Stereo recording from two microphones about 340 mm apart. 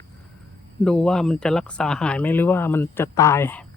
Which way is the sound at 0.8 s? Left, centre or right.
Centre.